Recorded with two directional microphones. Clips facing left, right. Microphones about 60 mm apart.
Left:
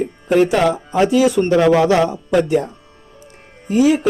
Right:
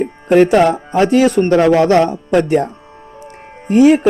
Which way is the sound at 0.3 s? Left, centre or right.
Right.